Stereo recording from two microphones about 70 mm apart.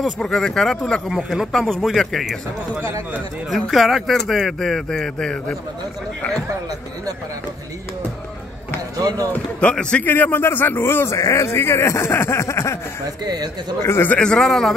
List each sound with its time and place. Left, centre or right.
0.2 s speech: centre
1.0 s speech: centre
3.4 s speech: centre
8.9 s speech: right
9.6 s speech: centre
10.0 s speech: left
11.1 s speech: left
11.4 s speech: left
13.2 s speech: right
13.8 s speech: left
14.1 s speech: centre